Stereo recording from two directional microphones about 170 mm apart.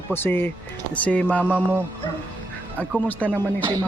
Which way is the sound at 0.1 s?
10° left (ahead or behind).